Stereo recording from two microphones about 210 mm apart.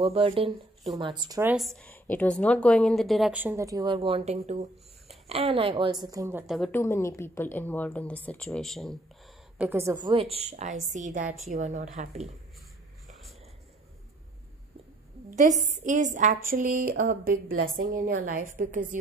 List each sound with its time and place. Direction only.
0.0 s a woman's voice: 25° right (ahead or behind)
1.5 s a woman's voice: centre (ahead or behind)
6.4 s a woman's voice: centre (ahead or behind)
6.7 s speech: 10° left (ahead or behind)
9.6 s a woman's voice: 10° right (ahead or behind)
10.0 s a woman's voice: 25° right (ahead or behind)
15.3 s a woman's voice: 35° right (ahead or behind)